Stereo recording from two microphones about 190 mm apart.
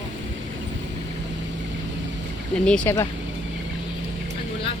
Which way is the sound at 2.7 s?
10° left (ahead or behind).